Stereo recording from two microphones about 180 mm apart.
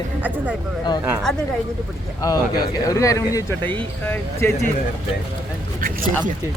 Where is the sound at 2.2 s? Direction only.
20° left (ahead or behind).